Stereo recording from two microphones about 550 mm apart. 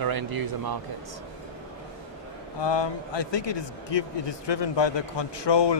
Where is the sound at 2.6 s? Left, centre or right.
Left.